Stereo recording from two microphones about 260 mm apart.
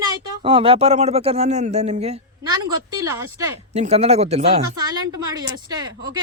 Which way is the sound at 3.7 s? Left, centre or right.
Right.